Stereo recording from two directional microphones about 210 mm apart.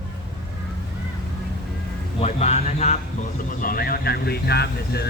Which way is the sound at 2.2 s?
30° left (ahead or behind).